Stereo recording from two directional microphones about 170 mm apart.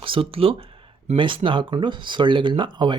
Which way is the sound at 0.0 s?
30° right (ahead or behind).